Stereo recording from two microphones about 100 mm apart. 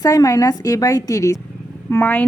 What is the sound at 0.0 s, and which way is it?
A woman's voice, 35° left (ahead or behind).